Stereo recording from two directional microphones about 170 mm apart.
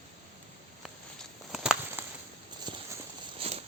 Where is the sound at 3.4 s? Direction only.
35° right (ahead or behind).